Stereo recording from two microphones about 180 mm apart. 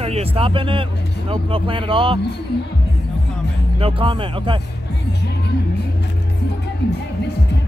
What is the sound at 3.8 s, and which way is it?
Speech, 30° right (ahead or behind).